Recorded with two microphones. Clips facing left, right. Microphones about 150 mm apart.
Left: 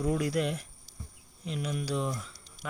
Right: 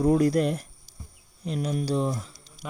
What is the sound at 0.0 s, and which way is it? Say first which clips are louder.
Speech: right 8 dB; 40° right (ahead or behind).